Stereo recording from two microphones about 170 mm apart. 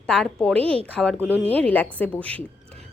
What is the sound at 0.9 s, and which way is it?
A woman's voice, 5° left (ahead or behind).